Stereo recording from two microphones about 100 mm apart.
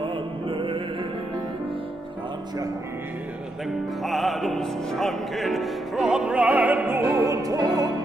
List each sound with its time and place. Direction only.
0.0 s chant: 55° right (ahead or behind)
4.0 s music: centre (ahead or behind); by 7.9 s 40° right (ahead or behind)